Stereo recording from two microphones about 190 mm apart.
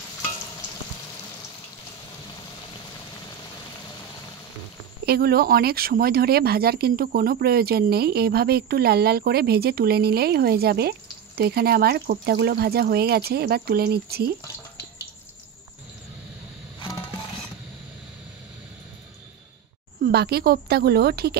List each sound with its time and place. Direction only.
5.0 s speech: 55° right (ahead or behind)
20.0 s speech: 55° right (ahead or behind)